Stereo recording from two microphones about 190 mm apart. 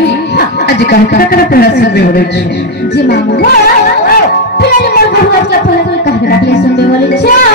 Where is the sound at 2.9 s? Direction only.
60° left (ahead or behind).